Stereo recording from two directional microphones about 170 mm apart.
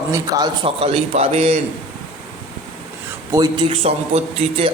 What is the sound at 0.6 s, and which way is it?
Speech, 35° right (ahead or behind).